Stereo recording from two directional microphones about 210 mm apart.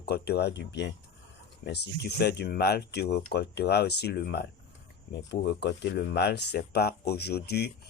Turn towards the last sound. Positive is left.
turn(degrees=50)  # may be behind; listen again after turning